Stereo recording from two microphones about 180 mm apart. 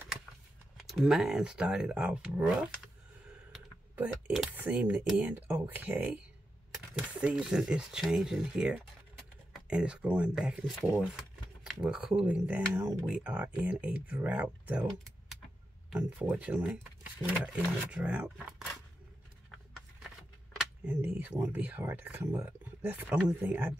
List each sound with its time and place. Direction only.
0.7 s speech: centre (ahead or behind)
7.2 s speech: 5° right (ahead or behind)
20.0 s speech: 5° right (ahead or behind)